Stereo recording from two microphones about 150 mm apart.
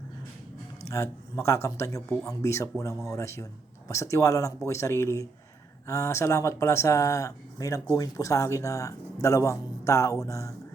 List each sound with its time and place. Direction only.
0.9 s speech: 20° left (ahead or behind)